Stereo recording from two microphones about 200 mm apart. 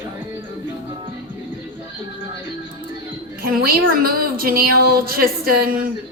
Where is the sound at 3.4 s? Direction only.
45° right (ahead or behind).